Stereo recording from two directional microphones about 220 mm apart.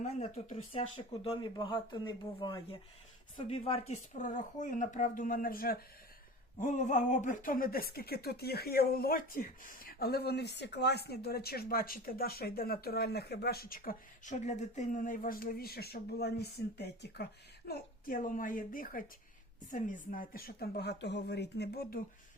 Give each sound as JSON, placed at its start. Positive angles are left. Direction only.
{"t": 0.0, "sound": "speech", "side_deg": 30}